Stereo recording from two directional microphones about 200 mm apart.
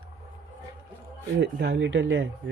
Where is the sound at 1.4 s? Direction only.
60° right (ahead or behind).